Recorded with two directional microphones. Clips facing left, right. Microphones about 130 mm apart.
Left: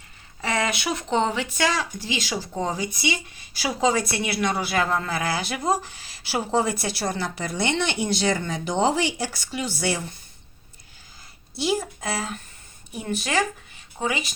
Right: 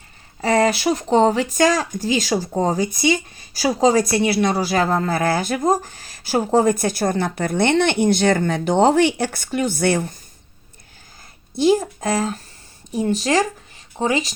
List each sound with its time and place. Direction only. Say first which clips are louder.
0.4 s speech: right 8 dB; 35° right (ahead or behind); by 10.2 s 55° right (ahead or behind)
11.5 s speech: right 9 dB; 45° right (ahead or behind)